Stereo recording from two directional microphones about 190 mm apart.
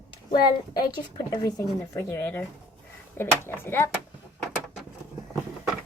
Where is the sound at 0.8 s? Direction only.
20° left (ahead or behind).